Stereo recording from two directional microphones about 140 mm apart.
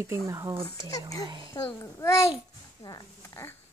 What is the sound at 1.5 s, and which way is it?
A child's voice, 20° left (ahead or behind).